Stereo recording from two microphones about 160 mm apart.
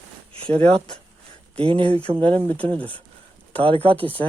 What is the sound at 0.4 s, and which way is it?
Speech, 35° right (ahead or behind).